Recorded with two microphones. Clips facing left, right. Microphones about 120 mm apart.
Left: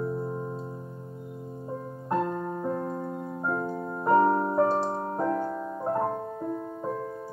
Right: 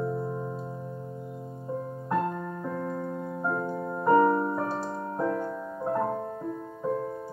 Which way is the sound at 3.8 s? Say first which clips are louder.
Right 1 dB; 15° left (ahead or behind).